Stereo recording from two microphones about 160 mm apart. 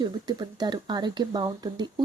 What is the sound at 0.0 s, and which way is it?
Speech, 25° right (ahead or behind).